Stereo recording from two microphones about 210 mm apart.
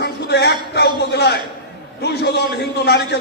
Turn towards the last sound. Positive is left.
turn(degrees=50)  # may be behind; listen again after turning